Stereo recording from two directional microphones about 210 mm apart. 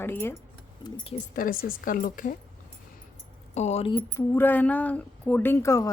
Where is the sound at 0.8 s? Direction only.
25° left (ahead or behind).